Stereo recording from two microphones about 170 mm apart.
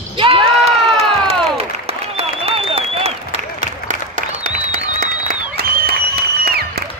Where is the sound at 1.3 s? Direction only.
35° right (ahead or behind).